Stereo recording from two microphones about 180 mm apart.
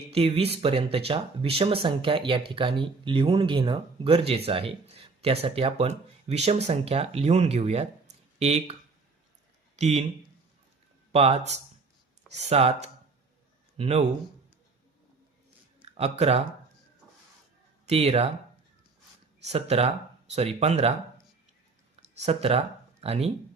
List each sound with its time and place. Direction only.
0.1 s speech: 35° right (ahead or behind)
9.7 s speech: 40° right (ahead or behind)
11.1 s speech: 35° right (ahead or behind)
15.8 s speech: 35° right (ahead or behind)
17.8 s speech: 35° right (ahead or behind)
19.5 s speech: 35° right (ahead or behind)
22.2 s speech: 35° right (ahead or behind)